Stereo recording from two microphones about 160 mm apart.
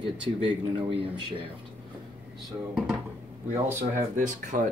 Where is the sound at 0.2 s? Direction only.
35° right (ahead or behind).